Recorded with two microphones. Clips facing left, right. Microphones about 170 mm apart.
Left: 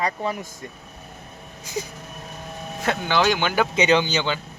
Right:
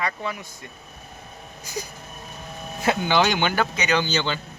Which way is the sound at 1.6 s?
25° left (ahead or behind).